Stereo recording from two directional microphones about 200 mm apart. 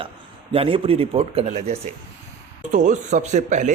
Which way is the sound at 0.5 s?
30° right (ahead or behind).